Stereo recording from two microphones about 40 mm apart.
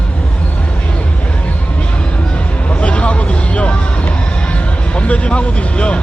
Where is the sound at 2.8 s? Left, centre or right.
Left.